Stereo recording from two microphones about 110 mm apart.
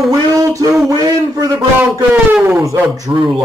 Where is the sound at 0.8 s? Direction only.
30° right (ahead or behind).